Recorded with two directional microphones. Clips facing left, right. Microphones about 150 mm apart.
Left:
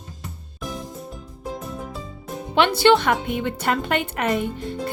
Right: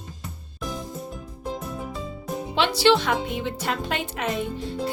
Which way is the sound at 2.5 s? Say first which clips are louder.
Left 3 dB; 55° left (ahead or behind).